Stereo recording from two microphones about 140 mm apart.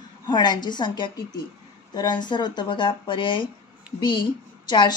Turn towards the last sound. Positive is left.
turn(degrees=30)  # may be behind; listen again after turning